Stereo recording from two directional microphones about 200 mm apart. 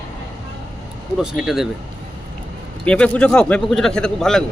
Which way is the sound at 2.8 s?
5° left (ahead or behind).